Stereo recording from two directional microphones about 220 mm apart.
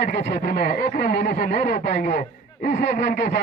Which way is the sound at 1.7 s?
35° left (ahead or behind).